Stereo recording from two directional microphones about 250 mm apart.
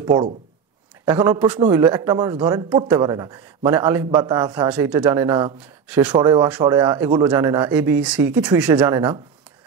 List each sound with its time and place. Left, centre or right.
1.0 s a man's voice: centre
4.6 s a man's voice: centre